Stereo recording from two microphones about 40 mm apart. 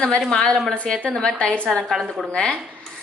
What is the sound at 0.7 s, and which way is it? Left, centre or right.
A woman's voice, left.